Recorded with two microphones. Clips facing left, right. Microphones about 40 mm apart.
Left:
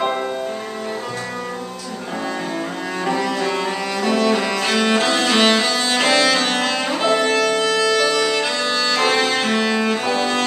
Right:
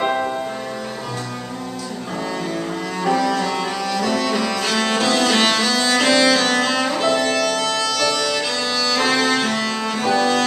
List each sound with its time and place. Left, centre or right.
3.0 s music: centre